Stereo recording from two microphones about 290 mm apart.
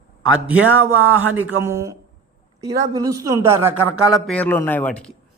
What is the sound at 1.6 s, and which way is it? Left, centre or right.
Speech, centre.